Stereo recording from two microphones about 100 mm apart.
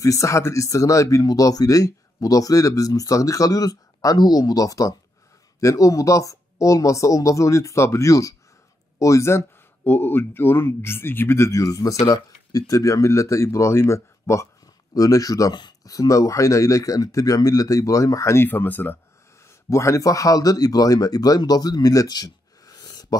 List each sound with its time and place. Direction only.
0.0 s speech: 30° left (ahead or behind)
19.7 s speech: 30° left (ahead or behind)